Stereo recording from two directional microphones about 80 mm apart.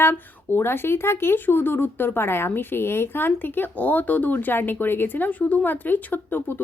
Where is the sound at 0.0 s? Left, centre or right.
Left.